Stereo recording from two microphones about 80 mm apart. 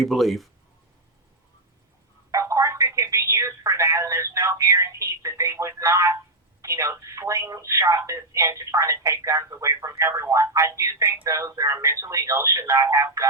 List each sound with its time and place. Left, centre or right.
0.0 s speech: centre
2.3 s telephone: right
6.6 s speech: right